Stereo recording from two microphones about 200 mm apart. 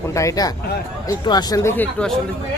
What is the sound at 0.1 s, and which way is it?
Speech, 15° left (ahead or behind).